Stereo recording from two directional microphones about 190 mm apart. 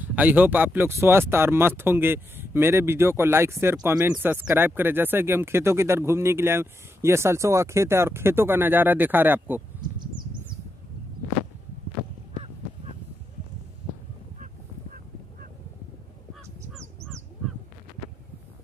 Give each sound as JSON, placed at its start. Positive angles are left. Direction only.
{"t": 0.0, "sound": "speech", "side_deg": -10}
{"t": 9.8, "sound": "insect", "side_deg": -25}
{"t": 16.7, "sound": "crow", "side_deg": 5}